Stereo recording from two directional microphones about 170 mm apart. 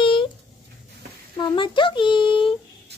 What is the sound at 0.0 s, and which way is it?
Dog, 30° left (ahead or behind).